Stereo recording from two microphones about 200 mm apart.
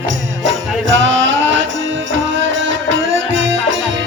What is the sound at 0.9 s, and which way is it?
Music, 70° right (ahead or behind).